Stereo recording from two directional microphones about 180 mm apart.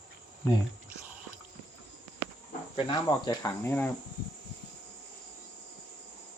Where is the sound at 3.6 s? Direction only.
10° left (ahead or behind).